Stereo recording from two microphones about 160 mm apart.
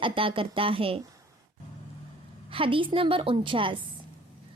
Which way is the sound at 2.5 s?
35° right (ahead or behind).